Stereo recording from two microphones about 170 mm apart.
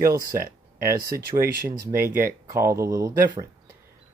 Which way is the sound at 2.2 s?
15° right (ahead or behind).